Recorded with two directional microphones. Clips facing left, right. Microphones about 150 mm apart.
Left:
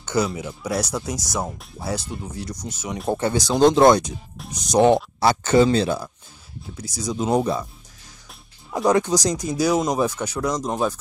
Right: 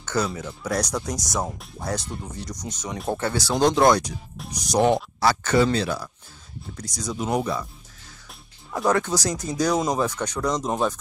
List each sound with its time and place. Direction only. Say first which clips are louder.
0.0 s speech: left 3 dB; 10° left (ahead or behind)
3.2 s speech: left 5 dB; 15° left (ahead or behind)
6.8 s speech: left 3 dB; 10° left (ahead or behind)
7.2 s speech: left 4 dB; 25° left (ahead or behind)
8.7 s speech: left 3 dB; 20° left (ahead or behind); by 11.0 s centre (ahead or behind)